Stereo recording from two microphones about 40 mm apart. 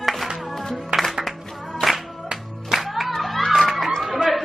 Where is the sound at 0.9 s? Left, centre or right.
Right.